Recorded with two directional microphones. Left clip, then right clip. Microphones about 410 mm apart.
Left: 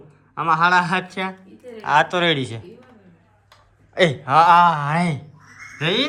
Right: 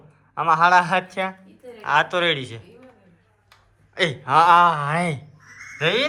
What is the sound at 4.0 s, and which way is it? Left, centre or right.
Speech, centre.